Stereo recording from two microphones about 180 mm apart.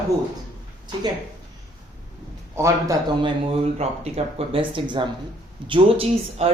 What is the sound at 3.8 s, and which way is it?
Speech, 35° right (ahead or behind).